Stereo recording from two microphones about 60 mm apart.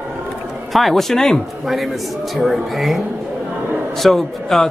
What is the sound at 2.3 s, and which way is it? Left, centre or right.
Speech, centre.